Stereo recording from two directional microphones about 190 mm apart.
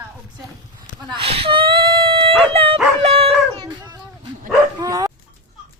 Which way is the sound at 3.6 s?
20° right (ahead or behind).